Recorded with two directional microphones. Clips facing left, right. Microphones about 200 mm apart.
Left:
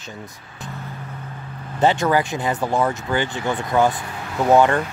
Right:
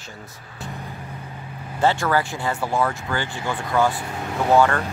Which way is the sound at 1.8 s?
20° left (ahead or behind).